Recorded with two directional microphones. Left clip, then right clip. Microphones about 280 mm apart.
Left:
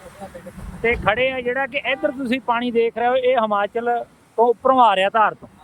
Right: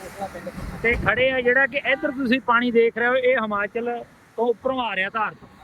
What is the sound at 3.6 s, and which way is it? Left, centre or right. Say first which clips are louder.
Speech: left 5 dB; left.